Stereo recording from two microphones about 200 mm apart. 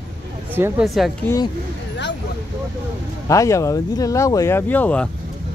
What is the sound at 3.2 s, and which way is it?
Speech, 15° left (ahead or behind).